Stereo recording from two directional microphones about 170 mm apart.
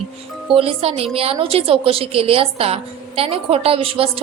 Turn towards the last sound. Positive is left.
turn(degrees=-35)  # may be behind; listen again after turning